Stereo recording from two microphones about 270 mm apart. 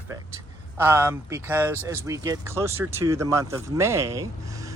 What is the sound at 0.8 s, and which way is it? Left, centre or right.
Speech, centre.